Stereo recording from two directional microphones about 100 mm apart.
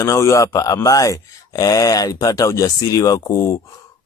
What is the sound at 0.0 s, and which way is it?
Speech, 30° left (ahead or behind).